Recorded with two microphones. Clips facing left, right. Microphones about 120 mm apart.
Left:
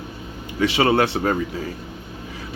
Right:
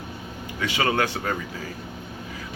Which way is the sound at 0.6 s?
30° left (ahead or behind).